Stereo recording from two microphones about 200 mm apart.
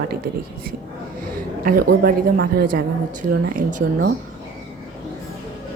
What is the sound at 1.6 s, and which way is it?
A woman's voice, 45° right (ahead or behind).